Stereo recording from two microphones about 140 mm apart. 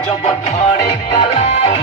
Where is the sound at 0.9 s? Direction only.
45° left (ahead or behind).